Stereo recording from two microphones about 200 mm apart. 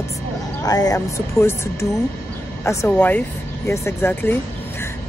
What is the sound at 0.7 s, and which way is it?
Speech, 20° left (ahead or behind).